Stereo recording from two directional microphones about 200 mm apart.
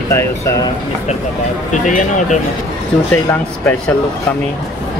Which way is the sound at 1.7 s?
40° left (ahead or behind).